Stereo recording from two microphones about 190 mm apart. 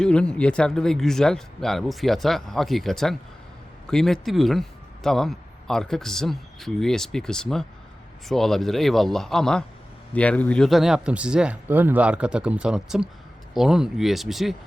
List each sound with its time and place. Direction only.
0.0 s speech: 5° left (ahead or behind)